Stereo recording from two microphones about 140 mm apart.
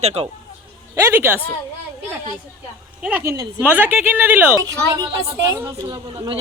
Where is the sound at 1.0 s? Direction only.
15° right (ahead or behind).